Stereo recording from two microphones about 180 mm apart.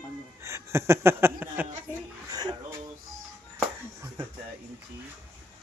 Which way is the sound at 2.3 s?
20° right (ahead or behind).